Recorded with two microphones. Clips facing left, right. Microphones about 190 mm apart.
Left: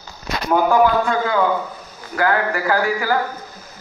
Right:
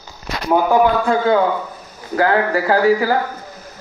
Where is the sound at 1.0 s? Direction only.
30° right (ahead or behind).